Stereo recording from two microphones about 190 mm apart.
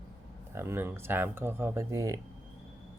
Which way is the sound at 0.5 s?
10° right (ahead or behind).